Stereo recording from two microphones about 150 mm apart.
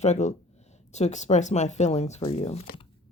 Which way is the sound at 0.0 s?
50° left (ahead or behind).